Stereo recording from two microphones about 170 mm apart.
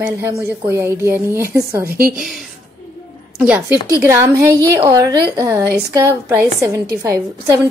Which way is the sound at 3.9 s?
15° right (ahead or behind).